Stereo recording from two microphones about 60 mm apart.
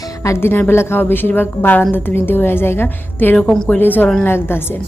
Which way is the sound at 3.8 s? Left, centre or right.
Left.